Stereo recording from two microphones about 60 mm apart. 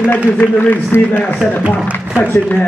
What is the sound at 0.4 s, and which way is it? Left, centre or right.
Speech, left.